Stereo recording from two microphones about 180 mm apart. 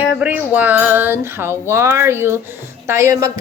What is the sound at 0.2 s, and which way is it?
A woman's voice, 10° right (ahead or behind).